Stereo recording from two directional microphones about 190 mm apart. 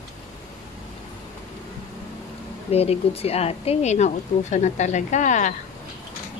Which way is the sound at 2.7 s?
30° left (ahead or behind).